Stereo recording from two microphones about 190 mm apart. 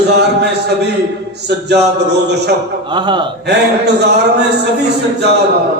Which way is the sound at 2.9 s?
25° right (ahead or behind).